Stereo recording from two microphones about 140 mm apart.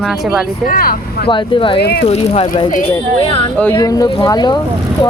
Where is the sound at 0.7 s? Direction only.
90° left.